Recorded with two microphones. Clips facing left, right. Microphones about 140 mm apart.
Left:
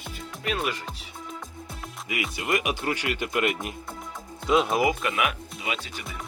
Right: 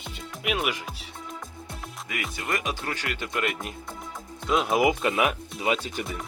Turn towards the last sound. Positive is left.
turn(degrees=-40)  # may be behind; listen again after turning